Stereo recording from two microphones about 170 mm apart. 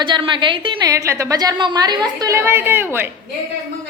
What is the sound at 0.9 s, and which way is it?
A woman's voice, 20° right (ahead or behind).